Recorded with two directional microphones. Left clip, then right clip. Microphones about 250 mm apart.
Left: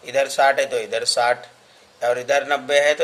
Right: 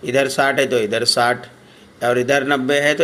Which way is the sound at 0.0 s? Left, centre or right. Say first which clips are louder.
Right 1 dB; centre.